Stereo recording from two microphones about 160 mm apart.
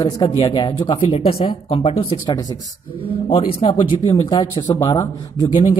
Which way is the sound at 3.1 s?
35° left (ahead or behind).